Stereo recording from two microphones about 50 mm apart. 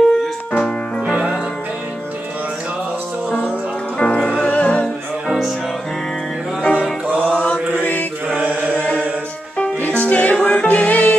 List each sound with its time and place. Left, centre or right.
0.5 s keyboard: left
1.0 s music: right
4.0 s music: centre
6.6 s music: left
7.2 s mantra: centre
7.8 s mantra: left
8.7 s music: left